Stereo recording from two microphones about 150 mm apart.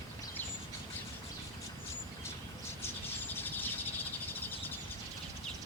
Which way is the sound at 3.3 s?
15° left (ahead or behind).